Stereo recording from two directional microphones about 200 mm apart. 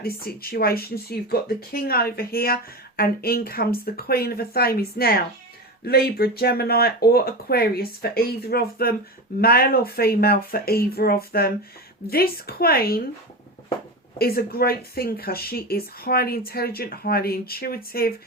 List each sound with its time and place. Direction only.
0.0 s speech: 50° left (ahead or behind)
14.2 s speech: 50° left (ahead or behind)